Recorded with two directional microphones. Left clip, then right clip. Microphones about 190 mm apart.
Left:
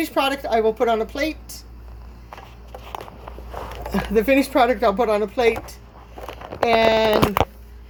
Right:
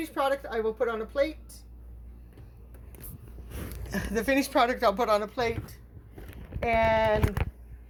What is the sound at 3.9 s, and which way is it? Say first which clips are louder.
Speech: left 9 dB; 5° left (ahead or behind).